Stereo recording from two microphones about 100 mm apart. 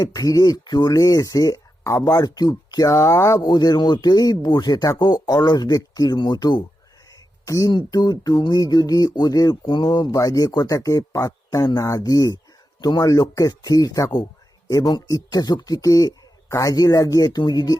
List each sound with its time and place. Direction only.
0.0 s speech: 35° left (ahead or behind)
7.4 s speech: 35° left (ahead or behind)
7.7 s speech: 45° left (ahead or behind)
9.6 s speech: 50° left (ahead or behind)
9.9 s speech: 40° left (ahead or behind)